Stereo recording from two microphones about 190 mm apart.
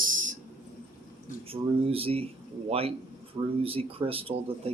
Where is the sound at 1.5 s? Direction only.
30° right (ahead or behind).